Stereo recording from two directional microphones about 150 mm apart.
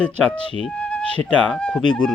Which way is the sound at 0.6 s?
5° left (ahead or behind).